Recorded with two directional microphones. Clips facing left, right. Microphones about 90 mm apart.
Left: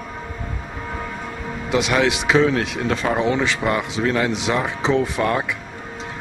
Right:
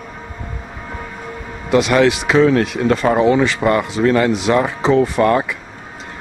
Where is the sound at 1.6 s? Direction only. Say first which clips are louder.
Right 6 dB; centre (ahead or behind).